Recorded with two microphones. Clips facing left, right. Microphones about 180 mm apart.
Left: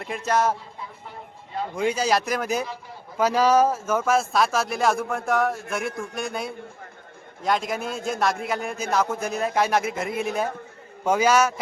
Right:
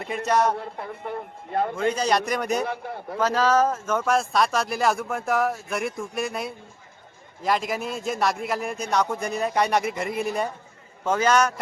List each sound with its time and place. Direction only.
0.0 s speech: centre (ahead or behind)
0.5 s a man's voice: 60° right (ahead or behind)
1.7 s speech: 10° left (ahead or behind)
2.6 s a man's voice: 60° right (ahead or behind)
3.2 s a man's voice: 10° left (ahead or behind)